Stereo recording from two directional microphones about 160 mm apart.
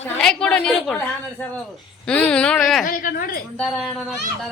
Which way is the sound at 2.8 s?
60° left (ahead or behind).